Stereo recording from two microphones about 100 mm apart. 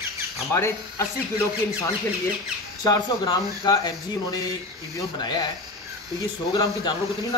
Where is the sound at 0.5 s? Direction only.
30° left (ahead or behind).